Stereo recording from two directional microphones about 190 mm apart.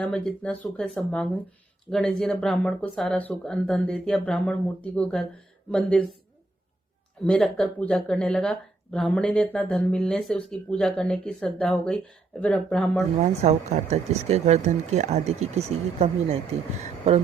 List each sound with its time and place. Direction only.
0.0 s speech: 5° left (ahead or behind)
7.3 s speech: 5° left (ahead or behind)
13.1 s speech: 35° right (ahead or behind)